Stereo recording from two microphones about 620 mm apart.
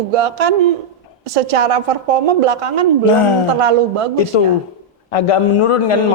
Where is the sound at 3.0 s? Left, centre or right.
Left.